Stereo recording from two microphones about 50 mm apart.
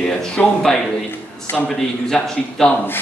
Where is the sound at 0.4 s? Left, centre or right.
Left.